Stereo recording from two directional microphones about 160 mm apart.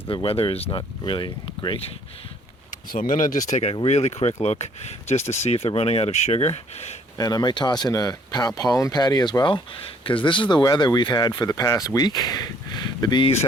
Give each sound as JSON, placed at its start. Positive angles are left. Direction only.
{"t": 0.1, "sound": "speech", "side_deg": 35}
{"t": 2.9, "sound": "speech", "side_deg": 60}
{"t": 3.5, "sound": "speech", "side_deg": 40}
{"t": 7.2, "sound": "speech", "side_deg": 25}